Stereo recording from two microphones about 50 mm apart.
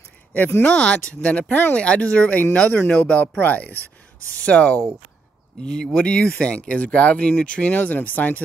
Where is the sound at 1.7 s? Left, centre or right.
Left.